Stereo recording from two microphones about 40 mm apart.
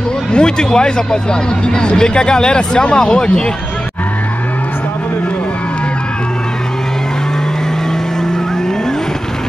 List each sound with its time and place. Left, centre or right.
0.3 s speech: left